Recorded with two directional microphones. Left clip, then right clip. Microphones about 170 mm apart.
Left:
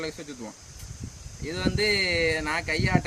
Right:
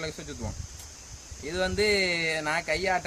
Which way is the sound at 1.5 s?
25° right (ahead or behind).